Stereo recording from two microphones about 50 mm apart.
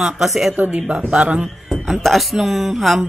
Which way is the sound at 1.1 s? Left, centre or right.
Right.